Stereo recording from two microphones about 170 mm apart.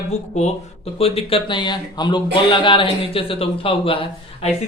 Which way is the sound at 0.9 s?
35° left (ahead or behind).